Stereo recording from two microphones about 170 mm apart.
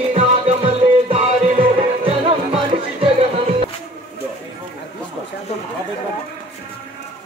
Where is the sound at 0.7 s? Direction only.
35° right (ahead or behind).